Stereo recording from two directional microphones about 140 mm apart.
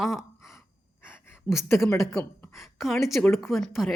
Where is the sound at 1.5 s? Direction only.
30° right (ahead or behind).